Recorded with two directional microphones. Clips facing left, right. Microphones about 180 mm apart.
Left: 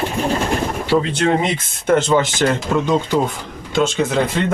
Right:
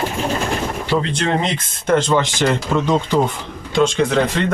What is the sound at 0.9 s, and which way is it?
Speech, 5° left (ahead or behind).